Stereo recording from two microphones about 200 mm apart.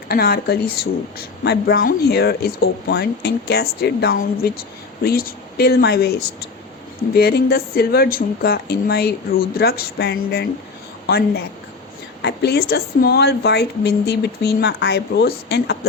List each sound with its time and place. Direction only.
0.1 s a woman's voice: 50° left (ahead or behind)